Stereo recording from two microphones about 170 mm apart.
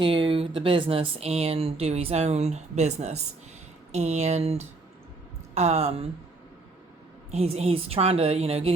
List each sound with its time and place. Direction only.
0.0 s speech: 30° right (ahead or behind)
7.3 s speech: 35° right (ahead or behind)